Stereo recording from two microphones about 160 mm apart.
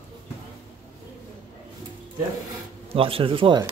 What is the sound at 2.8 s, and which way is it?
Speech, 35° right (ahead or behind).